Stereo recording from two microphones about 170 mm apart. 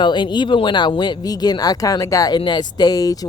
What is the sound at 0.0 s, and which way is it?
Speech, 25° left (ahead or behind).